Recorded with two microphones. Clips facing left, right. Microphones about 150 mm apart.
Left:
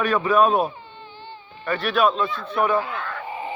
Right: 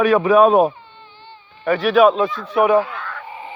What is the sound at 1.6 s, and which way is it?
A man's voice, 90° right.